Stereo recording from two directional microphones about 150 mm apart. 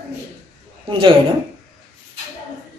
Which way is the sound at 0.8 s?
35° right (ahead or behind).